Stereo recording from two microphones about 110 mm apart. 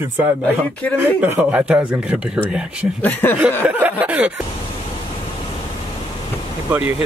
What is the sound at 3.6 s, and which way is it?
Speech, 15° right (ahead or behind).